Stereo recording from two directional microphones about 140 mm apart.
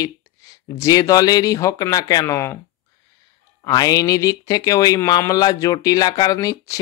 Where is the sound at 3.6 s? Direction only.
30° left (ahead or behind).